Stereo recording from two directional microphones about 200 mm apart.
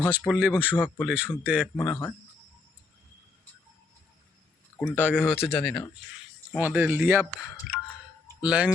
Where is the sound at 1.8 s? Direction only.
10° left (ahead or behind).